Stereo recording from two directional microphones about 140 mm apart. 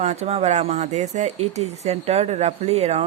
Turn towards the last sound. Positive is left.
turn(degrees=-50)  # may be behind; listen again after turning